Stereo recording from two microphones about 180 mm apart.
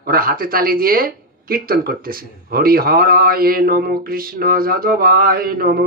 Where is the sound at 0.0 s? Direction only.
55° right (ahead or behind).